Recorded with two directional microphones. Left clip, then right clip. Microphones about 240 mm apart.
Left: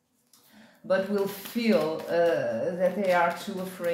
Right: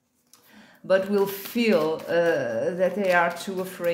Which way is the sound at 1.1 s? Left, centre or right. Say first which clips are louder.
Right 5 dB; right.